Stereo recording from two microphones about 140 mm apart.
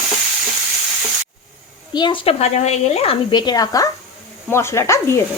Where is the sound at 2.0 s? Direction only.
35° left (ahead or behind).